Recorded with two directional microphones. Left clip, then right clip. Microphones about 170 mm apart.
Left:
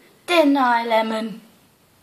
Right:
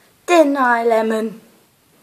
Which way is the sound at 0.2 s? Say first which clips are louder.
Right 3 dB; 40° right (ahead or behind).